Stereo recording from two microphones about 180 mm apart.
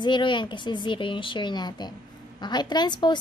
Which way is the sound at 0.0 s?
25° left (ahead or behind).